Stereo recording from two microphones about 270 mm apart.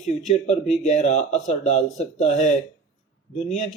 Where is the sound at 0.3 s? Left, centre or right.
Left.